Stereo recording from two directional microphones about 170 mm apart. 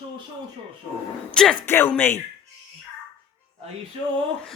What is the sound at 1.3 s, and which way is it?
Speech, 5° left (ahead or behind).